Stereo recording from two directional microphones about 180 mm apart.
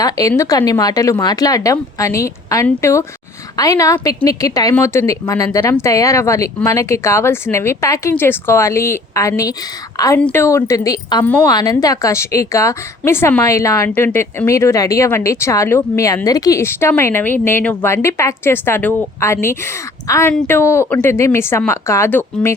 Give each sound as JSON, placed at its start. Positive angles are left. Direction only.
{"t": 0.0, "sound": "a woman's voice", "side_deg": 20}